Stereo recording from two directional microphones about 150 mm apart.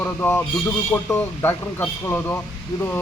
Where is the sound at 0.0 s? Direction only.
15° left (ahead or behind).